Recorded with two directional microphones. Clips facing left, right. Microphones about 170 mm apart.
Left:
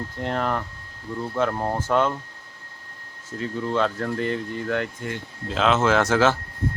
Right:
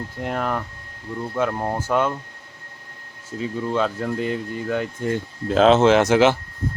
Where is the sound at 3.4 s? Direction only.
10° right (ahead or behind).